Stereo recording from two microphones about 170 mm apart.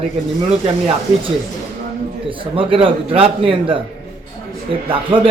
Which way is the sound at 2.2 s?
30° right (ahead or behind).